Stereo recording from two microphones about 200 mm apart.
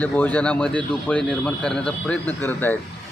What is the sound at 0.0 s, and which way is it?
A man's voice, 5° left (ahead or behind).